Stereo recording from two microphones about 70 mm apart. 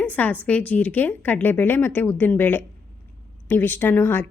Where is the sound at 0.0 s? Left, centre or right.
Left.